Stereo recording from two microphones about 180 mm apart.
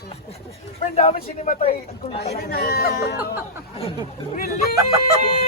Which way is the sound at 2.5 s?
60° left (ahead or behind).